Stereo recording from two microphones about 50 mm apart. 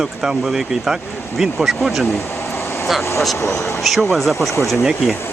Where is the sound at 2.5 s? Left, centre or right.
Left.